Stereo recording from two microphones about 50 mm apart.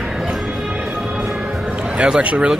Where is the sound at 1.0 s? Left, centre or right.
Centre.